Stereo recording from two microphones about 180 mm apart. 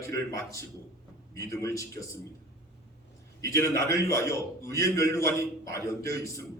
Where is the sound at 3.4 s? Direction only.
15° left (ahead or behind).